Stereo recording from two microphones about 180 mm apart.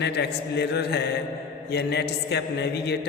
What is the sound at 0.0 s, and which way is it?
A man's voice, 70° left (ahead or behind).